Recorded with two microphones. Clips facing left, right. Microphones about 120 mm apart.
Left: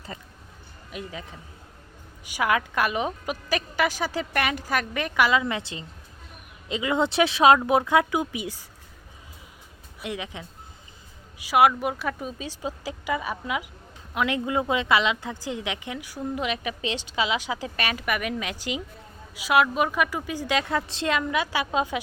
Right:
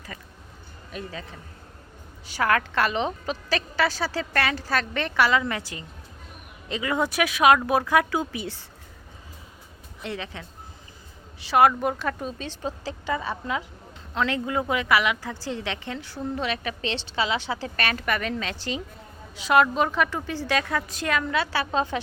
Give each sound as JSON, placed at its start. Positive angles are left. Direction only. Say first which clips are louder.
{"t": 0.1, "sound": "a woman's voice", "louder": "left 1 dB", "side_deg": 25}
{"t": 10.0, "sound": "a woman's voice", "louder": "even", "side_deg": 15}